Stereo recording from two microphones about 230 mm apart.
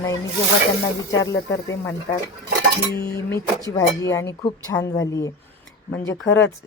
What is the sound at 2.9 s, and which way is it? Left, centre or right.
Speech, centre.